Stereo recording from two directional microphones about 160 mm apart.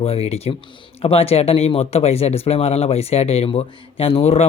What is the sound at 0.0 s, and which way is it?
Speech, 35° left (ahead or behind).